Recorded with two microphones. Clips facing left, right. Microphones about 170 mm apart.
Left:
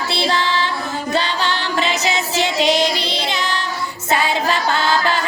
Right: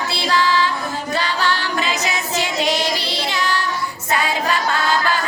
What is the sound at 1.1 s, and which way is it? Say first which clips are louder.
Music: left 1 dB; 25° left (ahead or behind).